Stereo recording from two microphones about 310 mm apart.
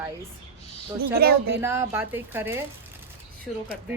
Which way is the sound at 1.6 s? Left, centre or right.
Centre.